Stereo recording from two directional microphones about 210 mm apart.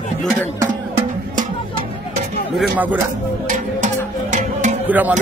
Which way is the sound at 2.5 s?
5° right (ahead or behind).